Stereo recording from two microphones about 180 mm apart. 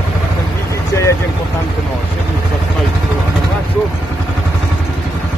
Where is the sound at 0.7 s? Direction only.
15° left (ahead or behind).